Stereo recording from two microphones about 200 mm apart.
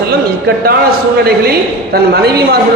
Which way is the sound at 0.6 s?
50° right (ahead or behind).